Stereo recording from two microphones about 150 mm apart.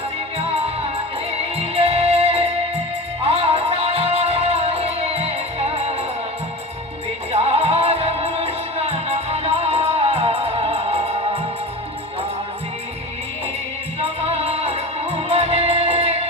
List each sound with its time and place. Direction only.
1.3 s music: 40° right (ahead or behind)
7.3 s music: 45° right (ahead or behind)
14.0 s music: 40° right (ahead or behind)